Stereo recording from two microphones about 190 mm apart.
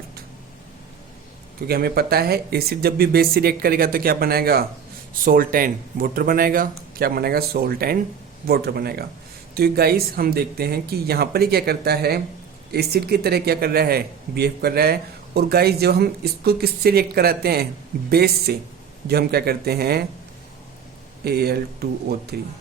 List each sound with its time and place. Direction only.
1.6 s speech: 55° right (ahead or behind)
21.2 s speech: 55° right (ahead or behind)